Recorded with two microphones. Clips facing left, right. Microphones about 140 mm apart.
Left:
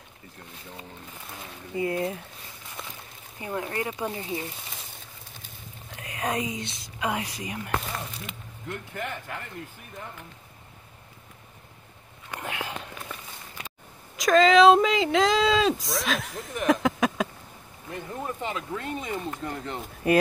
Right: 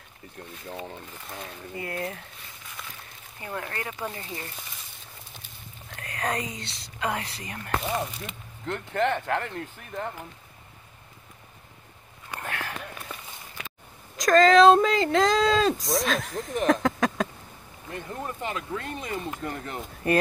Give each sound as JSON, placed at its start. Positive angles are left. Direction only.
{"t": 1.8, "sound": "speech", "side_deg": 20}
{"t": 3.3, "sound": "speech", "side_deg": 15}
{"t": 5.9, "sound": "speech", "side_deg": 10}
{"t": 8.6, "sound": "speech", "side_deg": -70}
{"t": 12.4, "sound": "a sound", "side_deg": 15}
{"t": 13.1, "sound": "walk", "side_deg": -15}
{"t": 14.1, "sound": "speech", "side_deg": 0}
{"t": 16.6, "sound": "a sound", "side_deg": 5}
{"t": 17.8, "sound": "speech", "side_deg": 0}